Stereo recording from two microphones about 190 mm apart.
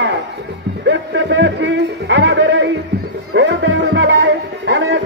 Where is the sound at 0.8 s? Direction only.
70° right (ahead or behind).